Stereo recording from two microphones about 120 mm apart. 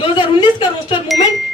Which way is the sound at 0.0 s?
40° left (ahead or behind).